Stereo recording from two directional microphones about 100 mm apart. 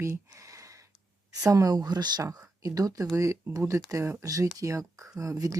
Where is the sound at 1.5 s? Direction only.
35° right (ahead or behind).